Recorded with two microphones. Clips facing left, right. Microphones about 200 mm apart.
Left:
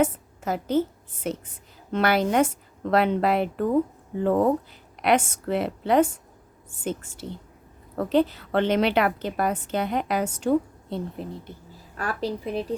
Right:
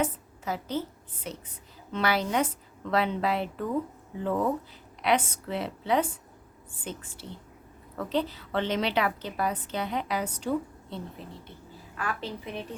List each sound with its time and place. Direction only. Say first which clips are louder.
0.0 s a woman's voice: left 6 dB; 50° left (ahead or behind)
11.9 s a woman's voice: left 6 dB; 40° left (ahead or behind)